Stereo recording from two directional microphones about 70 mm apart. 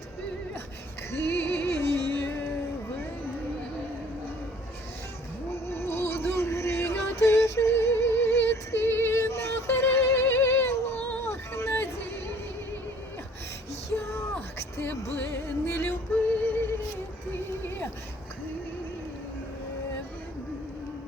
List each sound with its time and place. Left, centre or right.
1.1 s music: left
5.6 s music: left
13.9 s a sound: left
14.8 s music: left
15.7 s yodeling: left